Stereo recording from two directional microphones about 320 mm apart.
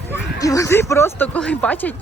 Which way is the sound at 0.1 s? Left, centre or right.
Centre.